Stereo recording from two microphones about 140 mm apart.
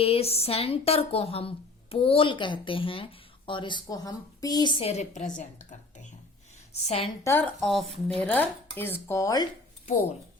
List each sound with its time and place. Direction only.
0.0 s speech: 45° left (ahead or behind); by 4.7 s 25° left (ahead or behind)
4.8 s a woman's voice: 50° left (ahead or behind)
6.8 s a woman's voice: 45° left (ahead or behind)
7.3 s speech: 15° left (ahead or behind)
7.6 s a woman's voice: centre (ahead or behind)
8.2 s speech: 10° left (ahead or behind)